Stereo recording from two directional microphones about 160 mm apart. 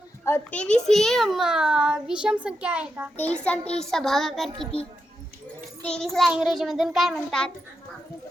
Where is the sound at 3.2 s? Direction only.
10° left (ahead or behind).